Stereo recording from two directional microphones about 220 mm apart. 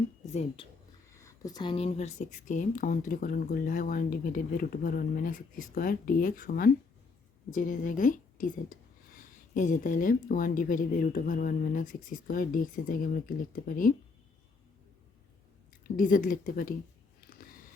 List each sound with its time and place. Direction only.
0.3 s speech: 25° left (ahead or behind)
1.1 s speech: 15° left (ahead or behind); by 13.9 s 40° left (ahead or behind)
15.8 s speech: 40° left (ahead or behind)
17.2 s a sound: 40° left (ahead or behind)